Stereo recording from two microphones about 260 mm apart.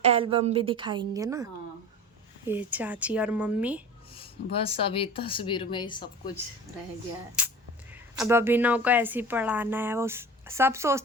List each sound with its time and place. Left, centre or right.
0.0 s a woman's voice: right
2.5 s speech: centre
4.1 s speech: left
7.4 s a sound: centre
8.2 s speech: centre